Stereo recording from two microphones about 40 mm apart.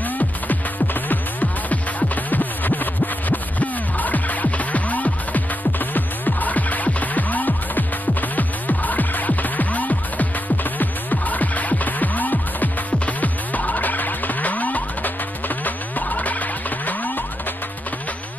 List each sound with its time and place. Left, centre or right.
1.0 s music: left